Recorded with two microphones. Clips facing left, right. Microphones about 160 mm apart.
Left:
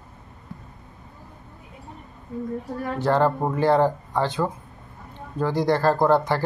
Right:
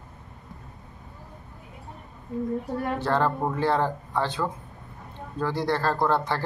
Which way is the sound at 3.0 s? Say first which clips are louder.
Left 6 dB; 15° left (ahead or behind).